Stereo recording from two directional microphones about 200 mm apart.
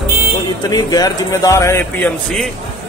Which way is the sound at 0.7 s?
20° left (ahead or behind).